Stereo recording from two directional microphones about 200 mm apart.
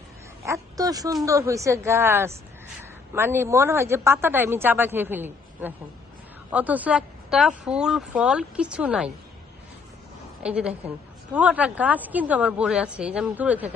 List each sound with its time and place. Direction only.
0.4 s a sound: 15° right (ahead or behind)
1.2 s speech: 15° right (ahead or behind)
10.4 s speech: 5° right (ahead or behind)